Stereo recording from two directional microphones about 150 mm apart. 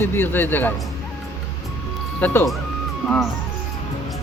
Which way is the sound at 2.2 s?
15° left (ahead or behind).